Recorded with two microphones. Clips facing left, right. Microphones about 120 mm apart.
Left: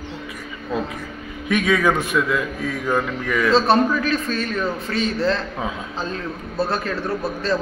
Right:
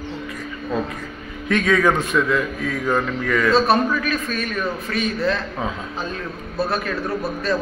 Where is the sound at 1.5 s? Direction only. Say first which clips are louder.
Right 1 dB; 10° left (ahead or behind).